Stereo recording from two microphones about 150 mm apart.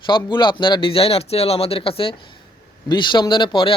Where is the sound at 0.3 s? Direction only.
30° left (ahead or behind).